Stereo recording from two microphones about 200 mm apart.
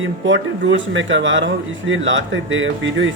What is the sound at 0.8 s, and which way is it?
Speech, 70° right (ahead or behind).